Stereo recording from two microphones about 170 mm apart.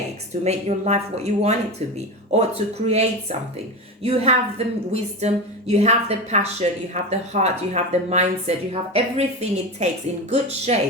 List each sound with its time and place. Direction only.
0.4 s a woman's voice: 40° right (ahead or behind)
2.8 s a woman's voice: 40° right (ahead or behind)